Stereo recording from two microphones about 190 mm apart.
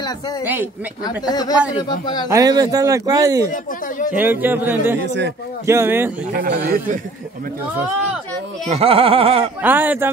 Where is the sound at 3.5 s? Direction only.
45° left (ahead or behind).